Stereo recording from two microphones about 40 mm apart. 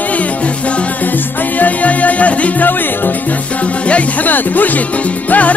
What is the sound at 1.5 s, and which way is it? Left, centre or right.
Music, left.